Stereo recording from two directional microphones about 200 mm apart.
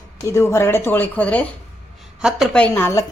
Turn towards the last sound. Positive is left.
turn(degrees=10)  # may be behind; listen again after turning